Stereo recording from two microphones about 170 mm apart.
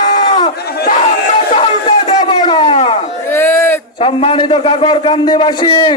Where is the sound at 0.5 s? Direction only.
70° left (ahead or behind).